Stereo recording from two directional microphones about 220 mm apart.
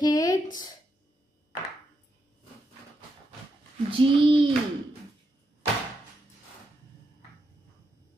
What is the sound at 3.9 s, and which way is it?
Speech, 25° right (ahead or behind).